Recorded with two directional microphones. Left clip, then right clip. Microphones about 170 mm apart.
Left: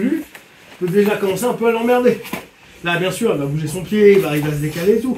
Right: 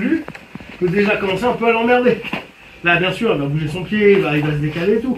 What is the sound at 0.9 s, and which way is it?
Speech, 10° left (ahead or behind).